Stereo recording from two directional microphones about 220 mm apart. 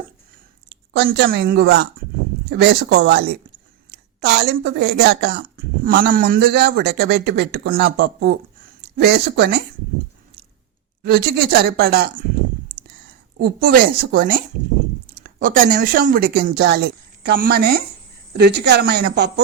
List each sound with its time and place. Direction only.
0.7 s a woman's voice: 50° right (ahead or behind)
11.0 s speech: 45° right (ahead or behind)
13.4 s speech: 45° right (ahead or behind)